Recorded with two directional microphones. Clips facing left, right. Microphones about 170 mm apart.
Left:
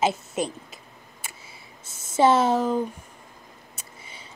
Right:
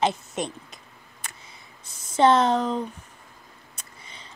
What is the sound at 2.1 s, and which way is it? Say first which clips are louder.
Speech: even; 5° left (ahead or behind).